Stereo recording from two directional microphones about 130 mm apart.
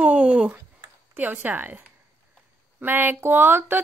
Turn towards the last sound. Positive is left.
turn(degrees=-15)  # may be behind; listen again after turning